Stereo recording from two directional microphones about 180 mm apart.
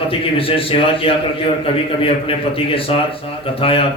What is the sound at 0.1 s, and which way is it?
A man's voice, 30° left (ahead or behind).